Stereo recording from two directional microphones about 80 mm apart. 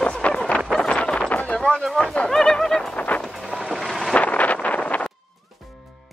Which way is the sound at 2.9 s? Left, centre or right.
Centre.